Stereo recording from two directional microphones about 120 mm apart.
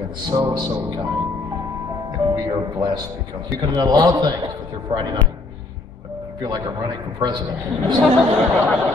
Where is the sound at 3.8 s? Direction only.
35° right (ahead or behind).